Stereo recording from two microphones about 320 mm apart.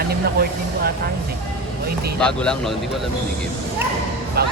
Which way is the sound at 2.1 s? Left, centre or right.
Centre.